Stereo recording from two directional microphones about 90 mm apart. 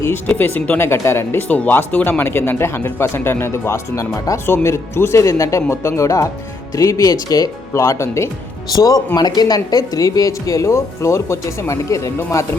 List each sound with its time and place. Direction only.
0.3 s speech: 20° left (ahead or behind)
8.7 s speech: 45° left (ahead or behind)